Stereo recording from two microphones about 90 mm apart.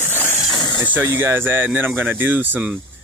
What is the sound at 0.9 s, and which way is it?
Speech, 25° right (ahead or behind).